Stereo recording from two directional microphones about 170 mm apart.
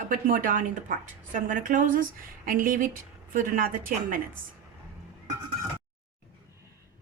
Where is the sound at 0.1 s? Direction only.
55° right (ahead or behind).